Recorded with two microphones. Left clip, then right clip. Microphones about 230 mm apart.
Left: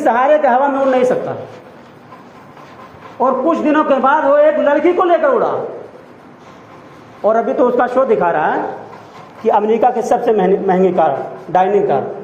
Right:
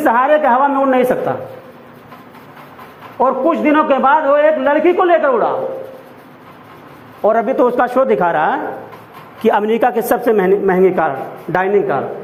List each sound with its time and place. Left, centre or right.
0.0 s a woman's voice: right
3.2 s a man's voice: right
7.2 s a man's voice: right